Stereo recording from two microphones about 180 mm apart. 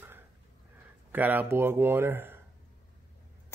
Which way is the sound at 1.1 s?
10° right (ahead or behind).